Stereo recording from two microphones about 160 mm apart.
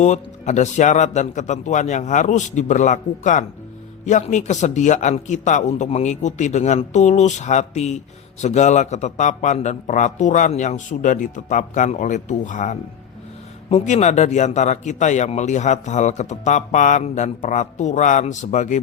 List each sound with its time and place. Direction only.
0.0 s a man's voice: 45° left (ahead or behind)